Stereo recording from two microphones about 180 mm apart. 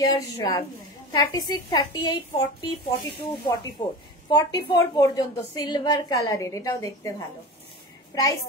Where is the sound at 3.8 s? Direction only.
25° left (ahead or behind).